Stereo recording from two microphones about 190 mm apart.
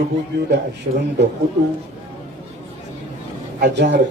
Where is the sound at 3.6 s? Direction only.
65° right (ahead or behind).